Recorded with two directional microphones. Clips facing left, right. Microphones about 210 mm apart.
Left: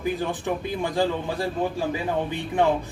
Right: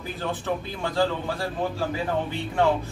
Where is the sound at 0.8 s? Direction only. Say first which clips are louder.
Right 1 dB; 15° left (ahead or behind).